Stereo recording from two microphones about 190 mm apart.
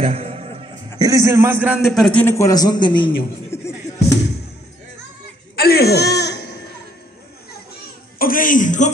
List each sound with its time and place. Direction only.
0.0 s music: 30° right (ahead or behind)
0.9 s a man's voice: 20° right (ahead or behind); by 3.1 s 25° left (ahead or behind)
3.4 s music: 15° left (ahead or behind)
5.6 s a sound: 55° left (ahead or behind)
8.2 s a man's voice: 45° left (ahead or behind)